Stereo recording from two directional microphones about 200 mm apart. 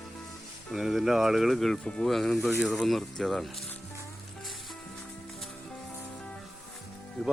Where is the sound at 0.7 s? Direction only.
Centre (ahead or behind).